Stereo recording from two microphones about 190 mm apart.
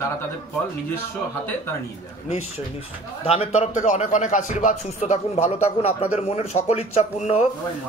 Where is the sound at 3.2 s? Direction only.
35° left (ahead or behind).